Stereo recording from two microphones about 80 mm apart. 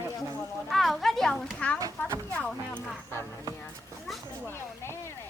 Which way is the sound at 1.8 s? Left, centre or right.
Right.